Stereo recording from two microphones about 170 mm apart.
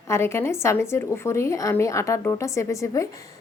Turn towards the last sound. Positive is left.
turn(degrees=20)  # may be behind; listen again after turning